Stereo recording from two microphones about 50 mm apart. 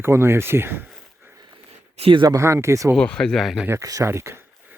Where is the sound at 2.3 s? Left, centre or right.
Right.